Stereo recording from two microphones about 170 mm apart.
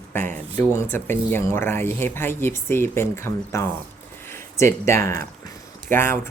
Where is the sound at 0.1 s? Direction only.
10° left (ahead or behind).